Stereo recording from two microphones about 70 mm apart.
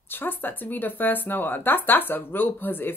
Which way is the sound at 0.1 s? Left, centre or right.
Left.